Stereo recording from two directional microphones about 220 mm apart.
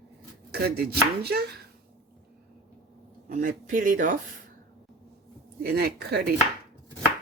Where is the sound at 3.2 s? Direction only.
35° right (ahead or behind).